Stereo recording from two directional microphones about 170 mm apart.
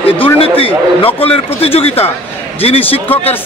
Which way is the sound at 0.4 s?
35° left (ahead or behind).